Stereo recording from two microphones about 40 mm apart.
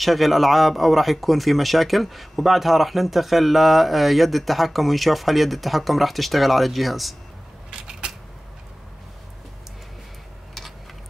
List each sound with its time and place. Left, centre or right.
0.0 s speech: centre
7.7 s camera: centre